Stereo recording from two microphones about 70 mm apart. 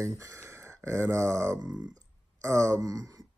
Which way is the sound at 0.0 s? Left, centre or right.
Right.